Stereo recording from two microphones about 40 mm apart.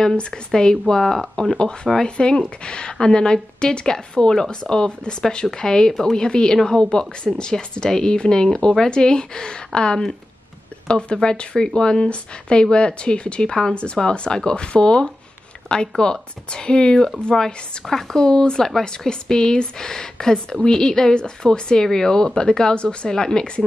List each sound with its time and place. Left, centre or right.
0.5 s speech: centre
2.0 s a woman's voice: left
17.8 s a woman's voice: centre